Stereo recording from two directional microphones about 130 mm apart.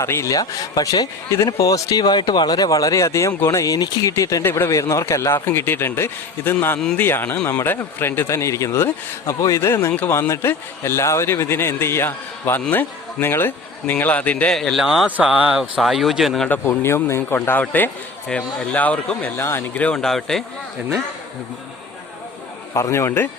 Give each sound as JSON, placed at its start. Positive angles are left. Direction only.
{"t": 0.0, "sound": "a man's voice", "side_deg": 20}
{"t": 16.5, "sound": "speech", "side_deg": 20}
{"t": 22.7, "sound": "speech", "side_deg": 20}